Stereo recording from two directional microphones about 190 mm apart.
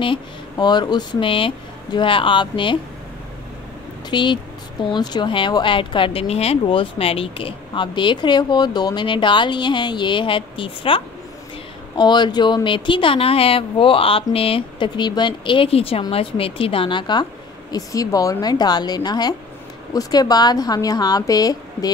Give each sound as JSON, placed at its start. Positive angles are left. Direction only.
{"t": 0.0, "sound": "speech", "side_deg": 25}
{"t": 4.1, "sound": "speech", "side_deg": 25}
{"t": 12.0, "sound": "speech", "side_deg": 25}